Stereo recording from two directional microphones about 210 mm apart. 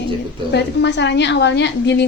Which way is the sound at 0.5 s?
55° left (ahead or behind).